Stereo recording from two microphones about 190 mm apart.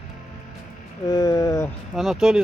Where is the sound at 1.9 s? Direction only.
Centre (ahead or behind).